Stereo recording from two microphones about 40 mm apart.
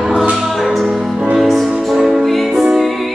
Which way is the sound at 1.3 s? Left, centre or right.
Centre.